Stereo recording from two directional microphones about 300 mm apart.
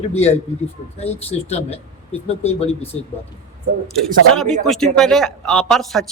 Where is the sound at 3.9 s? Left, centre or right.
Centre.